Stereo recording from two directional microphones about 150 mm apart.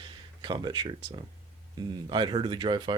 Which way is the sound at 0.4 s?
30° right (ahead or behind).